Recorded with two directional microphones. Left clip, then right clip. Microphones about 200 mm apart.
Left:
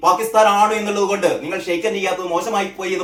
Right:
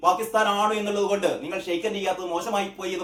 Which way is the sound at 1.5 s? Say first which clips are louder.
Left 7 dB; 5° right (ahead or behind).